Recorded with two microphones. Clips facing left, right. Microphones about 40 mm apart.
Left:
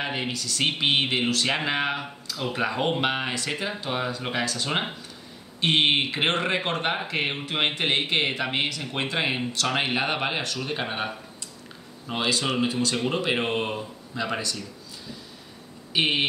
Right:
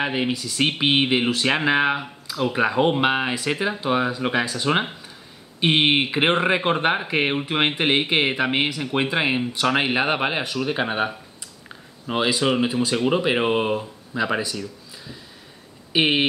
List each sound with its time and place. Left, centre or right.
0.0 s speech: centre
12.1 s speech: centre
15.9 s speech: centre